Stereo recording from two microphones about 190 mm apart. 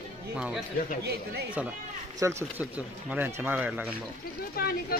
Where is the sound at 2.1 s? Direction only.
15° right (ahead or behind).